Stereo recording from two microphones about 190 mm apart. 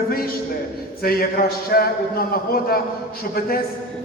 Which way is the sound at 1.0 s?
50° left (ahead or behind).